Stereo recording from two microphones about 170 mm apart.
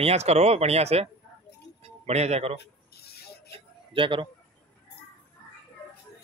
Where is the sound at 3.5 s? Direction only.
30° right (ahead or behind).